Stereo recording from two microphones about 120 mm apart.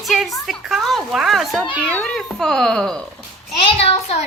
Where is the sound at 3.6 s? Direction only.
55° left (ahead or behind).